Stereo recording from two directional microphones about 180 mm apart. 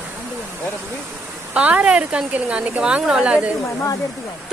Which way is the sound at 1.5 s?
10° right (ahead or behind).